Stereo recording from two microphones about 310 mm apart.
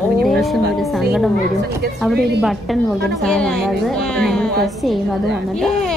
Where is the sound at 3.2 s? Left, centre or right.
Centre.